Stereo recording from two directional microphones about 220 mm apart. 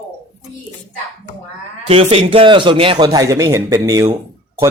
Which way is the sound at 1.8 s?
25° right (ahead or behind).